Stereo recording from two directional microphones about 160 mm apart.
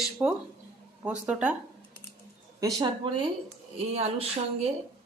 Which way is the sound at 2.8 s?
30° right (ahead or behind).